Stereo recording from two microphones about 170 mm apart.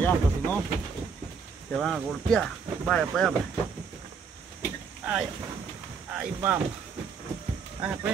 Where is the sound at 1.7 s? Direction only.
Centre (ahead or behind).